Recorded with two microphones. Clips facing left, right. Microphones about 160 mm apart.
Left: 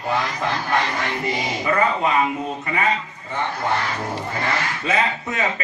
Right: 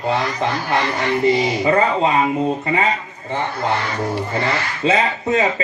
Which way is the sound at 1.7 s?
25° right (ahead or behind).